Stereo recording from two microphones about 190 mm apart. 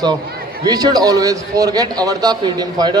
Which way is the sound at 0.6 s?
20° right (ahead or behind).